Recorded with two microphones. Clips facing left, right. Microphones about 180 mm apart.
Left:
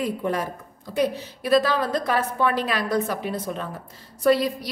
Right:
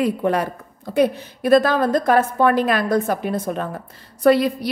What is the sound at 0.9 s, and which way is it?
A woman's voice, 50° right (ahead or behind).